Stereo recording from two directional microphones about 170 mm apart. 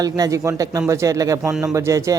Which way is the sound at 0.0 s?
20° right (ahead or behind).